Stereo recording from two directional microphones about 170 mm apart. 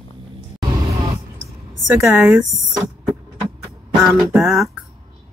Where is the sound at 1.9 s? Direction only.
15° right (ahead or behind).